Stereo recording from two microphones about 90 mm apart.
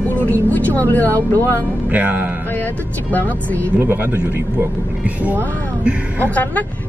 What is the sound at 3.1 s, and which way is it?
Speech, 20° left (ahead or behind).